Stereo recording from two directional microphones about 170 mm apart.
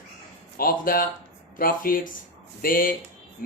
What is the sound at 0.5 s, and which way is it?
Speech, 55° left (ahead or behind).